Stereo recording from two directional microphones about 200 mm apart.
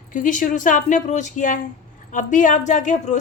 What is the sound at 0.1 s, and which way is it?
A woman's voice, 40° left (ahead or behind).